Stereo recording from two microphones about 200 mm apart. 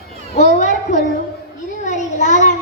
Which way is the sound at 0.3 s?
35° left (ahead or behind).